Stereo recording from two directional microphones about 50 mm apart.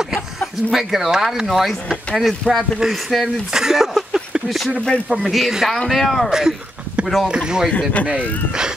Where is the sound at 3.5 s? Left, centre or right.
Centre.